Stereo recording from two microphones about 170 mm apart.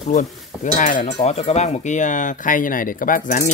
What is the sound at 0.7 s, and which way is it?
Speech, 45° left (ahead or behind).